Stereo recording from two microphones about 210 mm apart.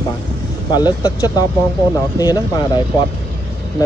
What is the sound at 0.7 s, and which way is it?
Speech, 20° left (ahead or behind).